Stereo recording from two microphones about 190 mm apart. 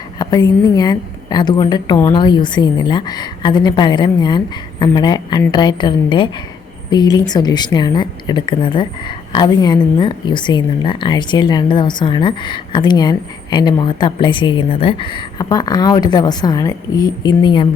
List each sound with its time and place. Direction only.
0.2 s speech: 20° left (ahead or behind)